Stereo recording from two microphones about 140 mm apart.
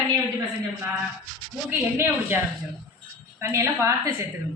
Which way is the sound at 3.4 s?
20° right (ahead or behind).